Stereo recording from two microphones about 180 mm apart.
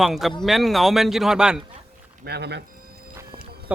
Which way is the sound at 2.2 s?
65° right (ahead or behind).